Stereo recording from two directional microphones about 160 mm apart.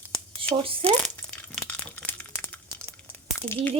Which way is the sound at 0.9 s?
10° left (ahead or behind).